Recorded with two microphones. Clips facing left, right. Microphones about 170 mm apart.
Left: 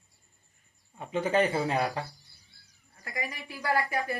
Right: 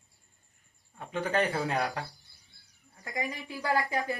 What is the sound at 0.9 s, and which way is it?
Speech, 10° left (ahead or behind).